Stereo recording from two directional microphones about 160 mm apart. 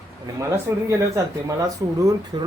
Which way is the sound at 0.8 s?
20° right (ahead or behind).